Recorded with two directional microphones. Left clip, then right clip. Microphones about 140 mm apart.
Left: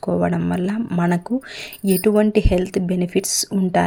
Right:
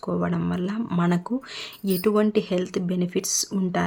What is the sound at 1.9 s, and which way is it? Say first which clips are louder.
Speech: left 5 dB; 30° left (ahead or behind).